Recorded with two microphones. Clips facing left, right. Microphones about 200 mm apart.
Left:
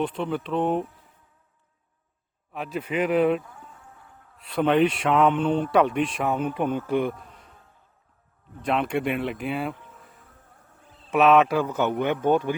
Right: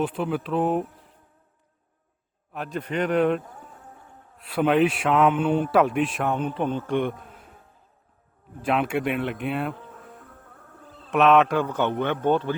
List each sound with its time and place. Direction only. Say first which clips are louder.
0.0 s a man's voice: right 1 dB; 5° right (ahead or behind)
2.5 s a man's voice: even; centre (ahead or behind)
3.4 s a sound: right 3 dB; 40° right (ahead or behind)
4.4 s a man's voice: even; 5° right (ahead or behind)
8.6 s a man's voice: right 1 dB; 5° right (ahead or behind)
9.7 s bee: right 7 dB; 60° right (ahead or behind)
11.1 s a man's voice: even; centre (ahead or behind)